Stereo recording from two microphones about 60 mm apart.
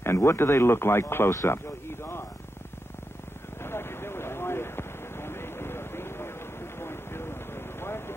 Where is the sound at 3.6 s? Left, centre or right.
Left.